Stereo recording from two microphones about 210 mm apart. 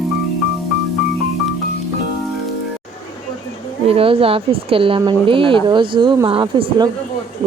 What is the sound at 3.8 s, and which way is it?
Speech, 25° right (ahead or behind).